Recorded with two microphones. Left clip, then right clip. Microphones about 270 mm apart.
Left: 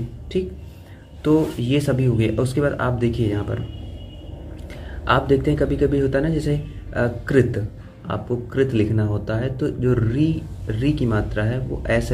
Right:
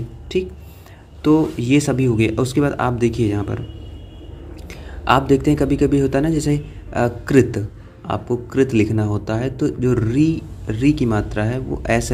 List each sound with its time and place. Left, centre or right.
1.2 s speech: right
4.6 s speech: right